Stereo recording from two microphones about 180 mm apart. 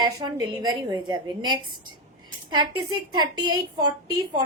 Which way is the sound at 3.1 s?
25° right (ahead or behind).